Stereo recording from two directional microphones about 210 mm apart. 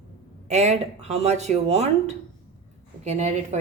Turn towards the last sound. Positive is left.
turn(degrees=-35)  # may be behind; listen again after turning